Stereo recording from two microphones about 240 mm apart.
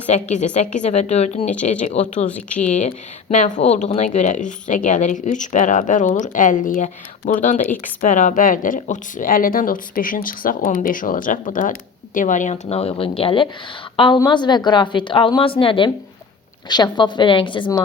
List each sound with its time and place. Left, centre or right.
0.1 s a woman's voice: left